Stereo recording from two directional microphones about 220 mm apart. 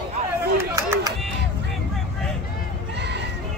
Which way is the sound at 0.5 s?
10° right (ahead or behind).